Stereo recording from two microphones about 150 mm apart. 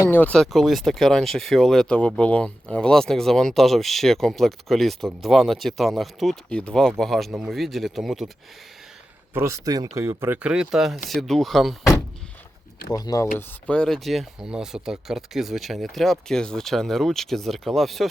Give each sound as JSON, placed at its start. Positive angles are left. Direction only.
{"t": 0.0, "sound": "speech", "side_deg": 10}
{"t": 9.3, "sound": "speech", "side_deg": -20}
{"t": 12.9, "sound": "speech", "side_deg": 25}
{"t": 13.7, "sound": "speech", "side_deg": 5}